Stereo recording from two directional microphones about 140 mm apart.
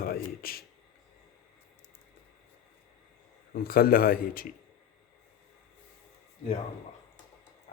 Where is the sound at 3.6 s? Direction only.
90° left.